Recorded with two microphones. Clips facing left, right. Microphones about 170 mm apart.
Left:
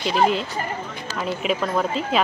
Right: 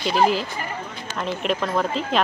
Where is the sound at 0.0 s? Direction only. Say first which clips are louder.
Even; centre (ahead or behind).